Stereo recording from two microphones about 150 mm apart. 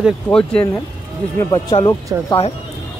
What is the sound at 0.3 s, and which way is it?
Speech, 5° left (ahead or behind).